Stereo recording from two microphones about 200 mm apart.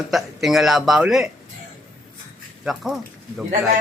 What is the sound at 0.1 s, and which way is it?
Speech, centre (ahead or behind).